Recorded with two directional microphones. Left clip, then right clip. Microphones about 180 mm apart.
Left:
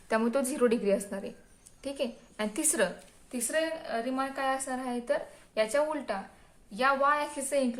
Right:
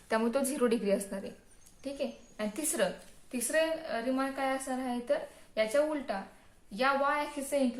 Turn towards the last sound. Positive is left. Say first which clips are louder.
# left 2 dB
turn(degrees=40)  # may be behind; listen again after turning